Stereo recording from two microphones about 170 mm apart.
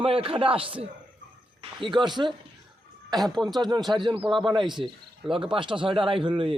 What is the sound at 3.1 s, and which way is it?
Speech, centre (ahead or behind).